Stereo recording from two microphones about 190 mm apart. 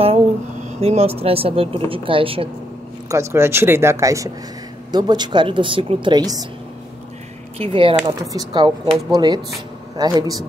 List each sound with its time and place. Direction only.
0.7 s speech: 35° right (ahead or behind)
3.1 s speech: 15° right (ahead or behind)
7.5 s speech: 30° right (ahead or behind)